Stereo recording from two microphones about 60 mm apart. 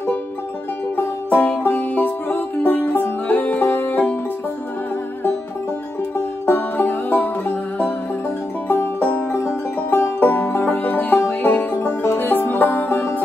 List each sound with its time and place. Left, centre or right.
0.9 s music: left
6.4 s music: left
8.6 s music: left